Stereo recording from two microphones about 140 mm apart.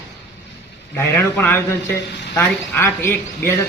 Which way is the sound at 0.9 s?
15° left (ahead or behind).